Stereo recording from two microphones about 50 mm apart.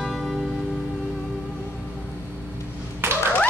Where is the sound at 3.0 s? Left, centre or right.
Right.